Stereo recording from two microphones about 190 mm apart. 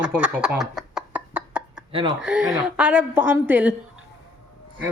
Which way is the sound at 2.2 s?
5° right (ahead or behind).